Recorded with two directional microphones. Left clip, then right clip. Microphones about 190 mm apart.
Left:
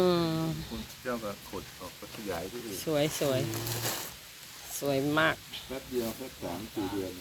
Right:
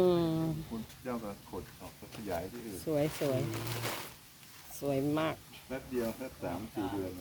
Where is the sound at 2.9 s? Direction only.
Centre (ahead or behind).